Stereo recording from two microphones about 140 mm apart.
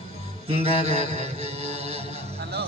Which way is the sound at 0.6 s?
50° right (ahead or behind).